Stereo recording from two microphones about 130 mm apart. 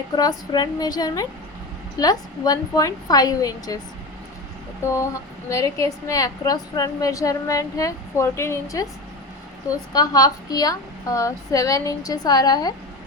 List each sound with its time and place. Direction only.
0.2 s a woman's voice: 30° left (ahead or behind)
4.8 s a woman's voice: 20° left (ahead or behind)